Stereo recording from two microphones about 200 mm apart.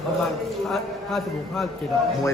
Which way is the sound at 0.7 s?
Centre (ahead or behind).